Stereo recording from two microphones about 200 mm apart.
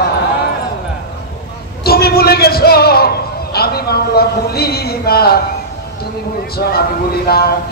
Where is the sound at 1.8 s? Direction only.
50° left (ahead or behind).